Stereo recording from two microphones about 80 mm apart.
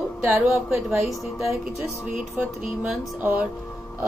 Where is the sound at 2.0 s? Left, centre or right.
Centre.